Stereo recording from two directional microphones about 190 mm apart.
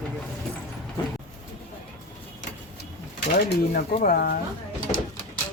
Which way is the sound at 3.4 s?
50° left (ahead or behind).